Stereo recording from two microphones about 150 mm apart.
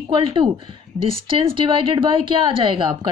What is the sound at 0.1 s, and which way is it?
Speech, 35° right (ahead or behind).